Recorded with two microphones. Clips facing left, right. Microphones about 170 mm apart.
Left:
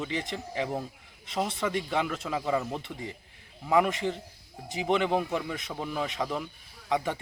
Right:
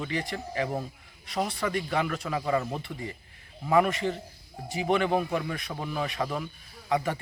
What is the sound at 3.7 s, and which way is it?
Speech, 15° left (ahead or behind).